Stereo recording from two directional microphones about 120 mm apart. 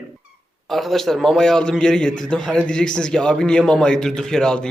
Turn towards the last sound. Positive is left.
turn(degrees=5)  # may be behind; listen again after turning